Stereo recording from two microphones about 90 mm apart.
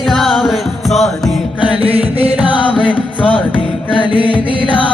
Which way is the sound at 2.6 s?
70° left (ahead or behind).